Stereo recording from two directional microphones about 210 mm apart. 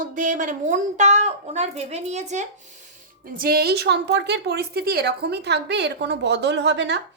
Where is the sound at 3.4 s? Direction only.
45° right (ahead or behind).